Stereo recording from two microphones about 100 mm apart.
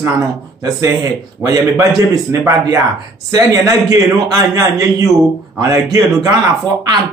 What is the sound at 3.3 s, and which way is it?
Speech, 35° right (ahead or behind).